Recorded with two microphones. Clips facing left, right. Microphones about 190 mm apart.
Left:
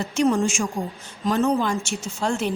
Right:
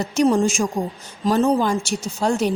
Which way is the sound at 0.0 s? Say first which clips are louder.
Right 3 dB; 40° right (ahead or behind).